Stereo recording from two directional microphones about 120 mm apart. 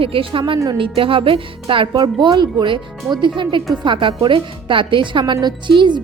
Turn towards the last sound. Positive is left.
turn(degrees=-40)  # may be behind; listen again after turning